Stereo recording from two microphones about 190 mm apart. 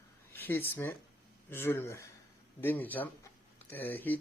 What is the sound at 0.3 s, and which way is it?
Speech, 10° left (ahead or behind).